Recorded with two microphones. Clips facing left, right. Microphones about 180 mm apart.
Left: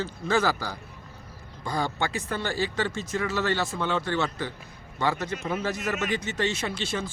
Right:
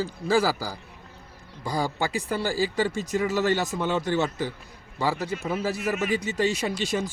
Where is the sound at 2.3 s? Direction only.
10° right (ahead or behind).